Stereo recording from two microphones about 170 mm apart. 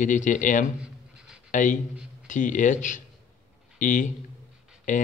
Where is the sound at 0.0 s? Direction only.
50° left (ahead or behind).